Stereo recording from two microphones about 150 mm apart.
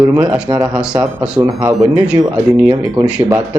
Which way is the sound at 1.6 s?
25° right (ahead or behind).